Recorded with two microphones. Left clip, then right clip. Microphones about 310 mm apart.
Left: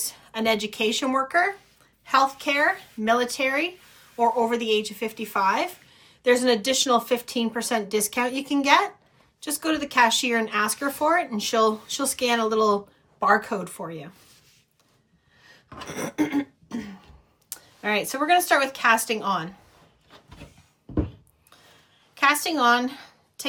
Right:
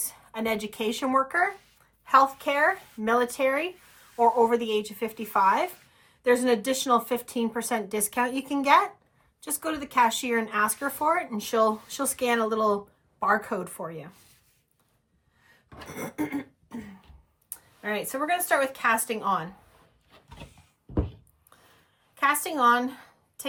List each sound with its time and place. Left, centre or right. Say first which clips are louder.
0.3 s speech: left 5 dB; centre
15.9 s a sound: left 6 dB; centre
17.5 s speech: left 6 dB; centre
22.1 s a woman's voice: left 4 dB; centre